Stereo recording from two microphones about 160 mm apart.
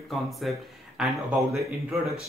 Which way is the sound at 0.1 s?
Centre (ahead or behind).